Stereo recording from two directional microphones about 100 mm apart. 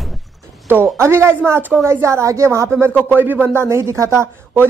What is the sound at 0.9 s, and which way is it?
Speech, 25° right (ahead or behind).